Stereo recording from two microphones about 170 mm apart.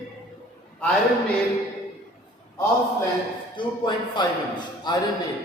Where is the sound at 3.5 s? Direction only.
25° left (ahead or behind).